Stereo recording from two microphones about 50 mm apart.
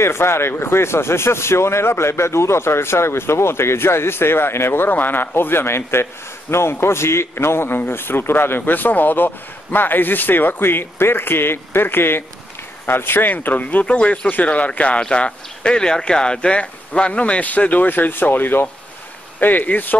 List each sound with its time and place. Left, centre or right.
0.0 s a man's voice: left
13.8 s speech: left